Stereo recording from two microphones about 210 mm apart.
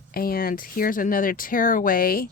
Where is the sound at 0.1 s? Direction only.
45° left (ahead or behind).